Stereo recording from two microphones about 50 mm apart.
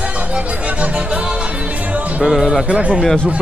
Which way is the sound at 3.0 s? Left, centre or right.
Centre.